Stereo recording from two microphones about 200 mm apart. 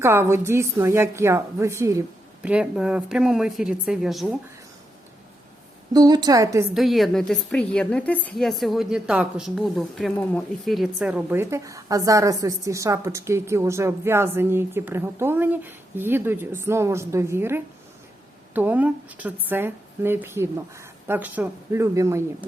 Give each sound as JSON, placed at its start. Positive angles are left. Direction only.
{"t": 0.0, "sound": "a woman's voice", "side_deg": -10}
{"t": 5.9, "sound": "a woman's voice", "side_deg": -20}
{"t": 6.7, "sound": "a woman's voice", "side_deg": 0}